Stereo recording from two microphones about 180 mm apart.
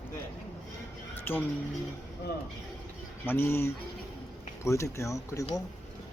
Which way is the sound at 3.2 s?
15° left (ahead or behind).